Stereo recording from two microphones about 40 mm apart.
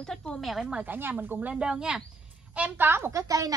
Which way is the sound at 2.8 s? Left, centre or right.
Right.